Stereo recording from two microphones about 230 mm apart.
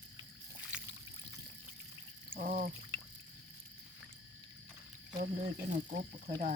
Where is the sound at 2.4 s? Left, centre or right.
Right.